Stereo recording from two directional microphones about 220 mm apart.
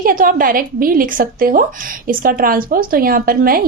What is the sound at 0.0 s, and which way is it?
A woman's voice, 40° right (ahead or behind).